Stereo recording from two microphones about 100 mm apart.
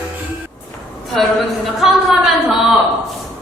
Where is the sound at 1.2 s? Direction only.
5° left (ahead or behind).